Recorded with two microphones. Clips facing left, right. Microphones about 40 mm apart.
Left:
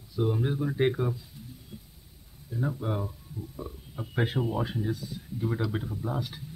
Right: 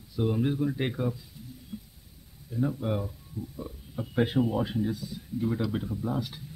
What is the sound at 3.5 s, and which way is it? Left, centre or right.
Speech, centre.